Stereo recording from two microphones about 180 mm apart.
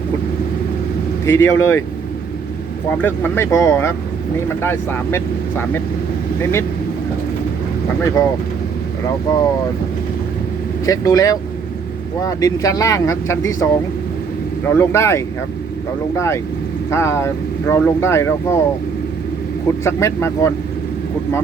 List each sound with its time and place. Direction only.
1.2 s speech: 15° left (ahead or behind)
3.0 s speech: 10° left (ahead or behind)
9.0 s speech: 20° left (ahead or behind)
10.8 s speech: 20° left (ahead or behind)
14.7 s speech: 15° left (ahead or behind)
19.8 s speech: 15° left (ahead or behind)